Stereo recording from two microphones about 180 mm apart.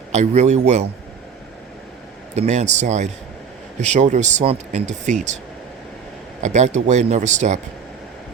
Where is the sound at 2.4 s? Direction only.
40° right (ahead or behind).